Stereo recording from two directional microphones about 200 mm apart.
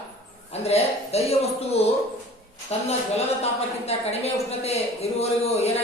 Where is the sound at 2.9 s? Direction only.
30° left (ahead or behind).